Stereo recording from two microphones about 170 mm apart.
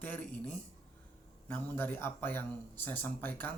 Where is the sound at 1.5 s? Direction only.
15° left (ahead or behind).